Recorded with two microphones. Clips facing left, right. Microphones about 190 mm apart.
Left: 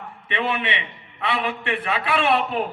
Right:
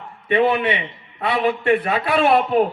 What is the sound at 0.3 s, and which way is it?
A man's voice, 40° right (ahead or behind).